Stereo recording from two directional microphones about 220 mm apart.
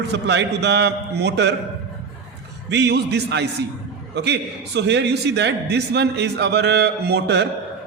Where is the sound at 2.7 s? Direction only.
50° right (ahead or behind).